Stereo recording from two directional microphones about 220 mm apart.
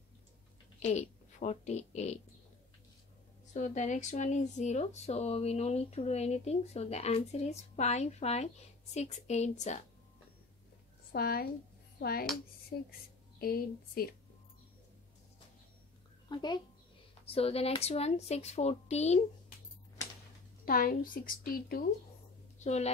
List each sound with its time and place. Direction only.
0.7 s a woman's voice: 30° left (ahead or behind)
3.5 s speech: 35° left (ahead or behind)
11.1 s a woman's voice: 45° left (ahead or behind)
16.3 s a child's voice: 20° left (ahead or behind)
20.6 s speech: 40° left (ahead or behind)
22.6 s a woman's voice: 30° left (ahead or behind)